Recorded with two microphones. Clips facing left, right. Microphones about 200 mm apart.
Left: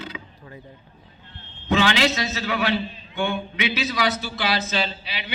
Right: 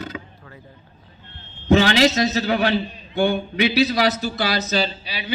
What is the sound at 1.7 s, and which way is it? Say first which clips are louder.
Speech: right 5 dB; 40° right (ahead or behind).